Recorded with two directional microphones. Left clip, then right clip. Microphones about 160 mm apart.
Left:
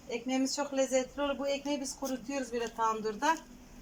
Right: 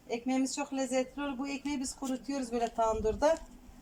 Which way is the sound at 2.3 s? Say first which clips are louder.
Right 4 dB; 35° right (ahead or behind).